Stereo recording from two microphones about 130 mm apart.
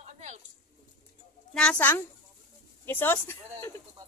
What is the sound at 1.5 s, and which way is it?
Speech, 5° left (ahead or behind).